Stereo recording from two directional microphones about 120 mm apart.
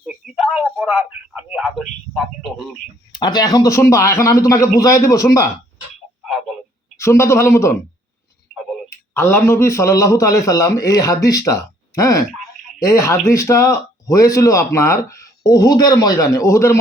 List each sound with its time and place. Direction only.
0.3 s a sound: 5° left (ahead or behind)
0.8 s speech: 5° right (ahead or behind)
1.6 s a man's voice: centre (ahead or behind)
3.1 s speech: 35° left (ahead or behind)
6.9 s speech: 25° left (ahead or behind)
8.5 s tick-tock: centre (ahead or behind)
9.1 s speech: 20° left (ahead or behind)